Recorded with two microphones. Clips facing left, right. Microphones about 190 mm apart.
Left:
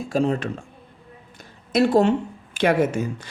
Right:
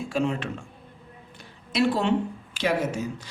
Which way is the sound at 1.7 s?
45° left (ahead or behind).